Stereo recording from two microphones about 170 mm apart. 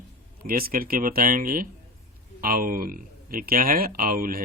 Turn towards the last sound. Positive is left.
turn(degrees=-55)  # may be behind; listen again after turning